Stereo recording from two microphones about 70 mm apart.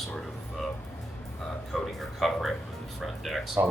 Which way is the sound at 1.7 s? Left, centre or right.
Centre.